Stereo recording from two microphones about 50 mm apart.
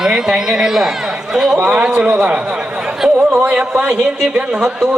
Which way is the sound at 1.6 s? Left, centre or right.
Right.